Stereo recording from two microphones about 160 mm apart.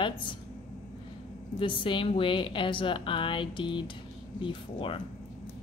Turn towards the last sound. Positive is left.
turn(degrees=35)  # may be behind; listen again after turning